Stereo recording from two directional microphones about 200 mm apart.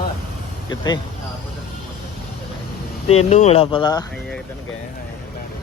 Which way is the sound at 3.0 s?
30° left (ahead or behind).